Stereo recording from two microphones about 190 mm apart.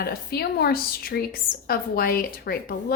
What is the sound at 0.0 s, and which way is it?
A woman's voice, 55° left (ahead or behind).